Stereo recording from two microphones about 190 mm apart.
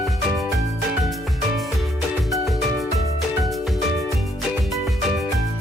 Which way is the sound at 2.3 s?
Centre (ahead or behind).